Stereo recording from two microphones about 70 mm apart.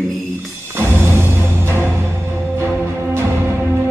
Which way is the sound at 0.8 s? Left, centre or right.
Right.